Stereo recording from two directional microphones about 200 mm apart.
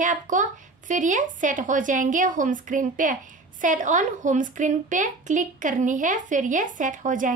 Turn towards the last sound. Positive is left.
turn(degrees=-40)  # may be behind; listen again after turning